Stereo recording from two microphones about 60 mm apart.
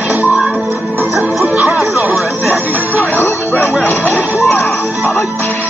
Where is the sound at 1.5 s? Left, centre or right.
Right.